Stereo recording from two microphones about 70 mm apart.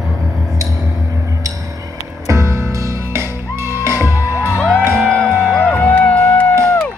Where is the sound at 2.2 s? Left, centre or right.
Right.